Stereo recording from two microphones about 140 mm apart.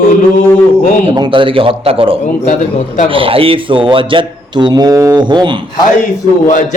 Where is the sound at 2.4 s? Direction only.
65° left (ahead or behind).